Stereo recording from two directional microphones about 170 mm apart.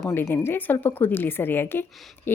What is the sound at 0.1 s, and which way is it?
A woman's voice, 15° left (ahead or behind).